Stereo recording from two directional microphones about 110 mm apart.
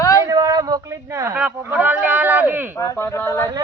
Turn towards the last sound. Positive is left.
turn(degrees=25)  # may be behind; listen again after turning